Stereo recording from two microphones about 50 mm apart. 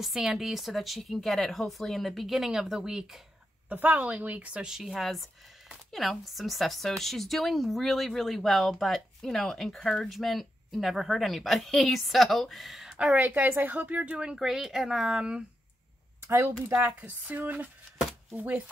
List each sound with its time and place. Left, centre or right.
0.2 s speech: centre
3.6 s speech: right
4.6 s speech: centre
12.9 s a woman's voice: right
13.2 s speech: right
14.1 s speech: centre
16.3 s speech: right
16.7 s speech: right